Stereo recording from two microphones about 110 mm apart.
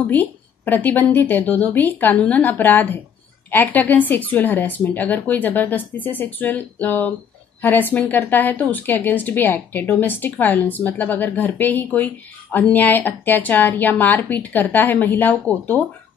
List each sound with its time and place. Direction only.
0.0 s speech: 15° left (ahead or behind)